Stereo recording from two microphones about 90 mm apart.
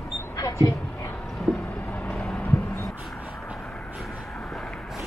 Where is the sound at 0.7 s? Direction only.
20° left (ahead or behind).